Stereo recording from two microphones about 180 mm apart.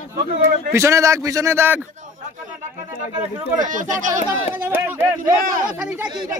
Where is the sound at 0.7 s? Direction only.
15° right (ahead or behind).